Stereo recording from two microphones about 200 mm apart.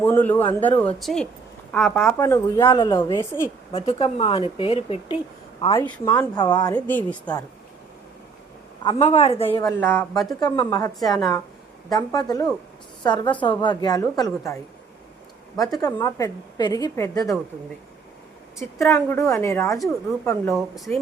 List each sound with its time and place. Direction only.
0.0 s a woman's voice: 10° left (ahead or behind)
2.1 s a woman's voice: 15° left (ahead or behind)
3.7 s speech: 30° left (ahead or behind)
5.7 s a woman's voice: 10° left (ahead or behind)
6.3 s speech: 20° left (ahead or behind)
6.7 s a woman's voice: 10° left (ahead or behind)
9.0 s a woman's voice: 35° left (ahead or behind)
9.6 s a woman's voice: 15° left (ahead or behind)
15.5 s a woman's voice: 20° left (ahead or behind)
18.8 s a woman's voice: 10° left (ahead or behind)
20.5 s speech: centre (ahead or behind)